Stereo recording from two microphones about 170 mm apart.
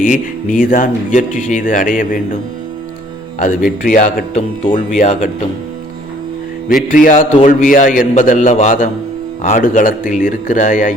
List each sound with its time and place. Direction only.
0.0 s speech: 50° left (ahead or behind)
3.8 s speech: 50° left (ahead or behind)
6.8 s speech: 50° left (ahead or behind)